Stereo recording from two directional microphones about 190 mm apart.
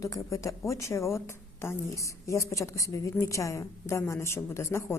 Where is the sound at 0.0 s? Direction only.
15° left (ahead or behind).